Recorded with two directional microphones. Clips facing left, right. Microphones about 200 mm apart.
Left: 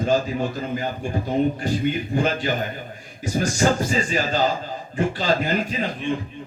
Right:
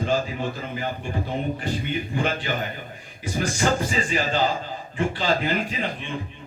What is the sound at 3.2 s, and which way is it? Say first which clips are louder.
Speech: left 4 dB; 40° left (ahead or behind).